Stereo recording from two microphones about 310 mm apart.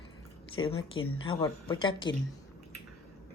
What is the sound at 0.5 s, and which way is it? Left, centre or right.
Speech, centre.